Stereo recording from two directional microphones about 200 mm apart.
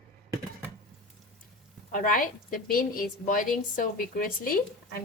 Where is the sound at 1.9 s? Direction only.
40° left (ahead or behind).